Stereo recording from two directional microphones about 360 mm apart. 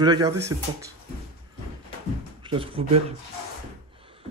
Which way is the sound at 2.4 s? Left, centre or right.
Centre.